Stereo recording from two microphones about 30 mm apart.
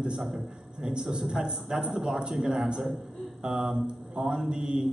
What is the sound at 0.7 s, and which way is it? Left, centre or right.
A man's voice, right.